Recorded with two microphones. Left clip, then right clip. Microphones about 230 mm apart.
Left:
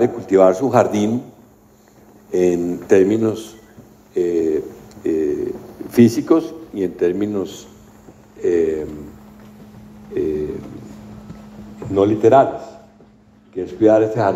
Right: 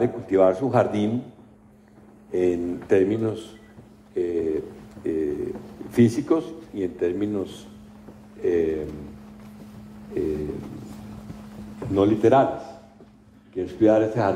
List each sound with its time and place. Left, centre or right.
0.0 s a man's voice: left
2.3 s a man's voice: left
4.1 s a sound: left
5.9 s a man's voice: left
11.9 s a man's voice: centre
13.6 s a man's voice: centre